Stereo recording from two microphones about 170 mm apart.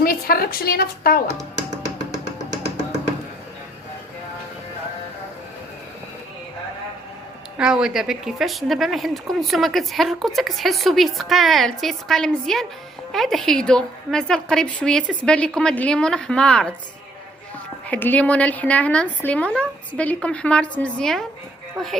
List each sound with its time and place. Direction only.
0.0 s speech: 60° left (ahead or behind)
7.6 s a woman's voice: 5° right (ahead or behind)
17.8 s a woman's voice: 10° left (ahead or behind)